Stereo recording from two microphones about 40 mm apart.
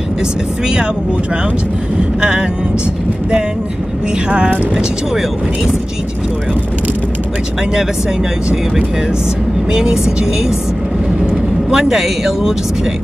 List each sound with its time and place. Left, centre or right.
2.1 s speech: right
9.7 s speech: centre
11.7 s speech: centre